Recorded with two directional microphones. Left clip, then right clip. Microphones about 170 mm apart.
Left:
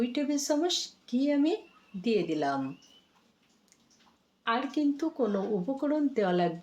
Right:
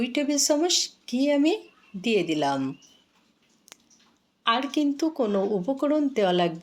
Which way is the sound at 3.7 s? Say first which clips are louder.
Right 17 dB; 20° right (ahead or behind).